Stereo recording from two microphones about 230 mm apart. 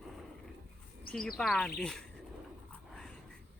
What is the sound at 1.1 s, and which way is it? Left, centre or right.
Speech, centre.